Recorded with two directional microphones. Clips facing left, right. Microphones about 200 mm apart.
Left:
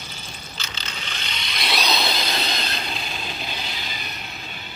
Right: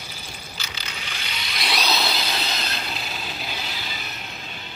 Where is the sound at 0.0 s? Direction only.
10° right (ahead or behind).